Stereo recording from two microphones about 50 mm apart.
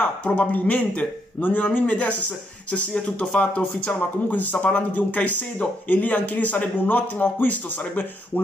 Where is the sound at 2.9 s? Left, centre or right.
Centre.